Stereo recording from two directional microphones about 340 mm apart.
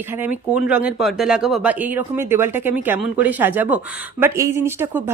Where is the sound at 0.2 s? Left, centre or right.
Centre.